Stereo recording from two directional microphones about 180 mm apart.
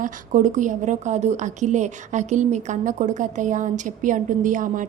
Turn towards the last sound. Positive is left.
turn(degrees=-45)  # may be behind; listen again after turning